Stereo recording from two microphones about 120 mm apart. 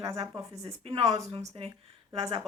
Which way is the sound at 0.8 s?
55° right (ahead or behind).